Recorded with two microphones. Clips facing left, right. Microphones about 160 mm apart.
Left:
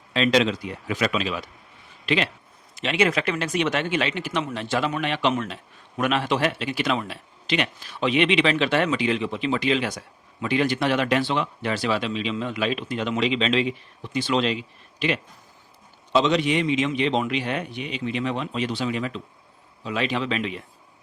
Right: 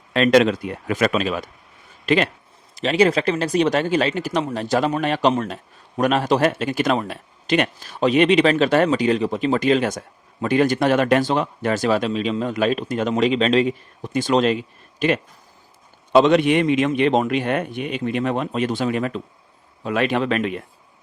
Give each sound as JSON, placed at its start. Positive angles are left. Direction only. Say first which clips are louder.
{"t": 0.1, "sound": "speech", "louder": "right 5 dB", "side_deg": -50}